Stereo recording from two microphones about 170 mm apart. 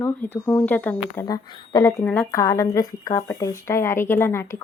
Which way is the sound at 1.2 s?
20° left (ahead or behind).